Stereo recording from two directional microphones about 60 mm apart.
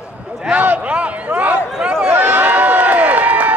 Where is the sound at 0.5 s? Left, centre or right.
Right.